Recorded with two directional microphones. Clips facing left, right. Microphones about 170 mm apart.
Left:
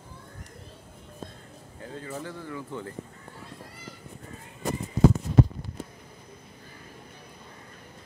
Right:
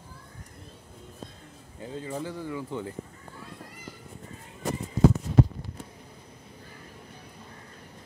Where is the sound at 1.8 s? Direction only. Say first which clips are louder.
Right 3 dB; 15° right (ahead or behind).